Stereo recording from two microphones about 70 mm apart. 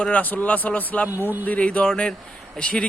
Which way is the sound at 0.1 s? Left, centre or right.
Left.